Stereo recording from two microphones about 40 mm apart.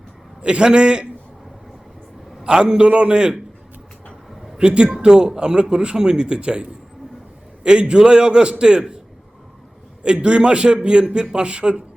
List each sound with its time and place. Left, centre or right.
0.4 s speech: right
2.4 s a man's voice: right
4.5 s a man's voice: right
10.0 s speech: right